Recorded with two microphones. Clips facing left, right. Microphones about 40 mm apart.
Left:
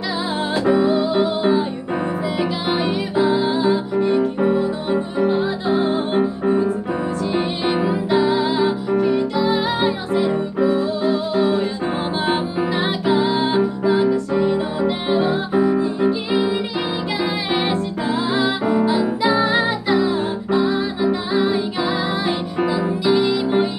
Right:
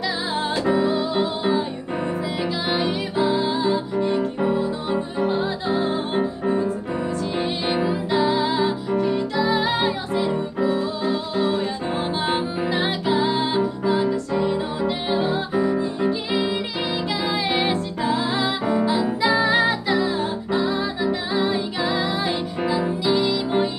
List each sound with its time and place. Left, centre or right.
0.7 s music: left
2.7 s music: left
4.9 s music: left
11.3 s music: centre
12.7 s music: left
17.6 s music: left